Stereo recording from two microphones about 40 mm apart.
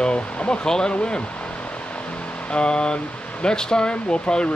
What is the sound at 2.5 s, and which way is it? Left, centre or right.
Speech, left.